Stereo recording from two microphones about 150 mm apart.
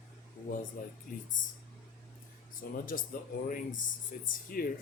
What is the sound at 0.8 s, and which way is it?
Speech, 70° left (ahead or behind).